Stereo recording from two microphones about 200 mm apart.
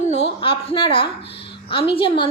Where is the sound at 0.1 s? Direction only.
30° left (ahead or behind).